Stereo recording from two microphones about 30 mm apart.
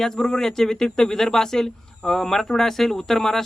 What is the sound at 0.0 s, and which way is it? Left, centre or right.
Speech, centre.